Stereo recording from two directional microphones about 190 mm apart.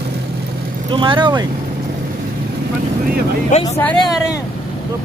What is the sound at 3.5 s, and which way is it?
Speech, 40° left (ahead or behind).